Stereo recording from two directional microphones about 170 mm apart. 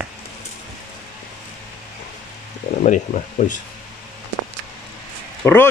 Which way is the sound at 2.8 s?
45° left (ahead or behind).